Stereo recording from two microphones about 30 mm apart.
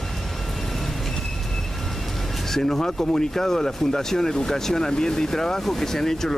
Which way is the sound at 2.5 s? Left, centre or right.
Centre.